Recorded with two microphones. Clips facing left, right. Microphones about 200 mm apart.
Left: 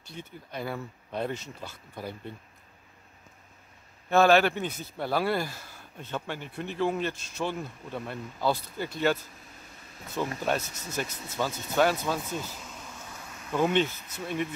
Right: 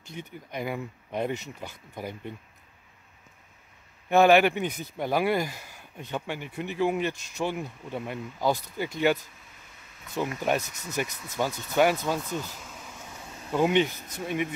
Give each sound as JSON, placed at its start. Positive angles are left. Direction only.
{"t": 0.1, "sound": "speech", "side_deg": -15}
{"t": 4.1, "sound": "speech", "side_deg": -15}
{"t": 13.5, "sound": "speech", "side_deg": -15}